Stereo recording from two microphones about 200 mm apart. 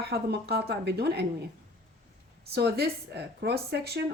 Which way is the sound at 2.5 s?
55° right (ahead or behind).